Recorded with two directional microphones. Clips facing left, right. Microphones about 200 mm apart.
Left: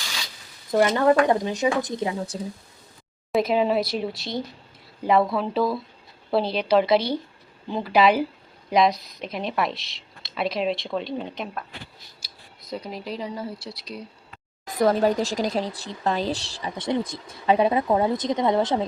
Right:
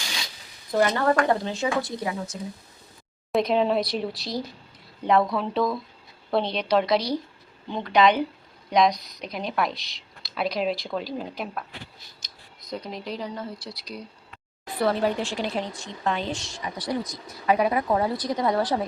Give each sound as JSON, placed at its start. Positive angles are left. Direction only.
{"t": 0.7, "sound": "a woman's voice", "side_deg": 15}
{"t": 3.3, "sound": "a woman's voice", "side_deg": 5}
{"t": 12.7, "sound": "a woman's voice", "side_deg": 5}
{"t": 14.7, "sound": "a woman's voice", "side_deg": 40}